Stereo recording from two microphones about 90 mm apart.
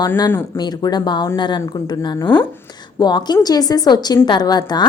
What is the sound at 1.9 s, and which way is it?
A woman's voice, 50° left (ahead or behind).